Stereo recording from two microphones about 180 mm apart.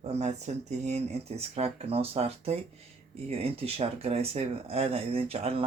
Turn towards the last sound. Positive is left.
turn(degrees=-35)  # may be behind; listen again after turning